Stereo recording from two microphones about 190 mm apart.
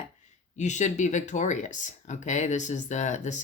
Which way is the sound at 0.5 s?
40° left (ahead or behind).